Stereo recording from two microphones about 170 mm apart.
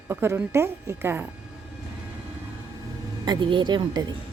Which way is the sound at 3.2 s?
25° right (ahead or behind).